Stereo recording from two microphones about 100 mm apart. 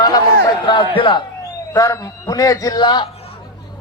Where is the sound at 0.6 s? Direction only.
55° left (ahead or behind).